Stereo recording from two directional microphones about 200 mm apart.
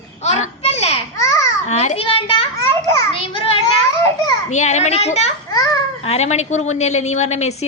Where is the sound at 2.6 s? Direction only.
15° left (ahead or behind).